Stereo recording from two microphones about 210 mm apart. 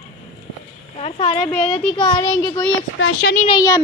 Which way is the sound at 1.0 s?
30° left (ahead or behind).